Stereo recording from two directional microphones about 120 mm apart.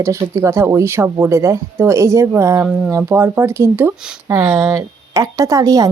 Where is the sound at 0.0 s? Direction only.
25° right (ahead or behind).